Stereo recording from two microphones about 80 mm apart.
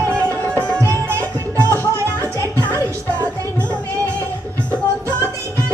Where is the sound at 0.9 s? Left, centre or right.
Right.